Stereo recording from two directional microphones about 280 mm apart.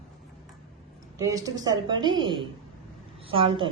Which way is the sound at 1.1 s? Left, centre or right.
Centre.